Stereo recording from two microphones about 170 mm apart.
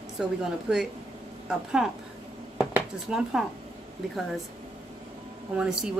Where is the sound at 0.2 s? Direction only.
5° right (ahead or behind).